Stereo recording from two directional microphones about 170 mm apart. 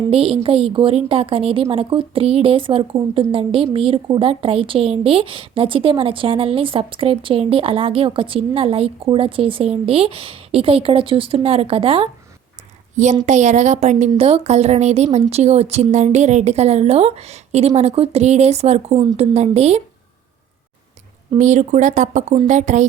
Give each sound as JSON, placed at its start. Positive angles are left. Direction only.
{"t": 0.1, "sound": "a woman's voice", "side_deg": -35}
{"t": 13.2, "sound": "a woman's voice", "side_deg": -45}
{"t": 21.3, "sound": "speech", "side_deg": -45}